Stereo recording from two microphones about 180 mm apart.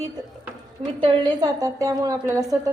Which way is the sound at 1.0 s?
25° right (ahead or behind).